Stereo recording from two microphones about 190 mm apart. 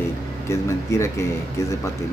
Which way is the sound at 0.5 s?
15° left (ahead or behind).